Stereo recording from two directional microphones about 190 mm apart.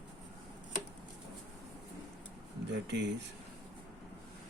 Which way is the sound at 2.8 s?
65° right (ahead or behind).